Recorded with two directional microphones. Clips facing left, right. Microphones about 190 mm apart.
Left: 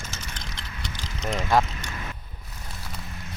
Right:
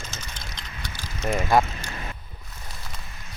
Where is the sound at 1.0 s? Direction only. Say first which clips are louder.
Right 3 dB; 10° right (ahead or behind).